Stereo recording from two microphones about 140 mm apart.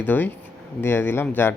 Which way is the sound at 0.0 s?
15° left (ahead or behind).